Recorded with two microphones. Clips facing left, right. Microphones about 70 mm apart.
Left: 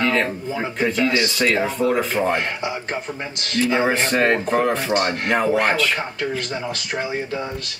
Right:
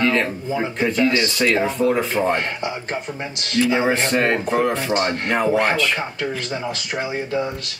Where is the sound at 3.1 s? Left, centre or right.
Centre.